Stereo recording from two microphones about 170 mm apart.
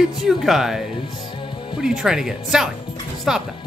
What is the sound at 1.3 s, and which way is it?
Music, 30° left (ahead or behind).